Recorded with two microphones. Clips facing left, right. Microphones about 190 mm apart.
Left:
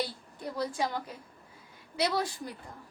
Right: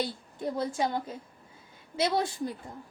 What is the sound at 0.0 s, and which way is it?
A woman's voice, 25° right (ahead or behind).